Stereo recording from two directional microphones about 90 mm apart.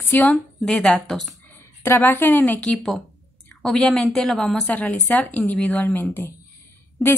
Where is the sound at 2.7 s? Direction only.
Centre (ahead or behind).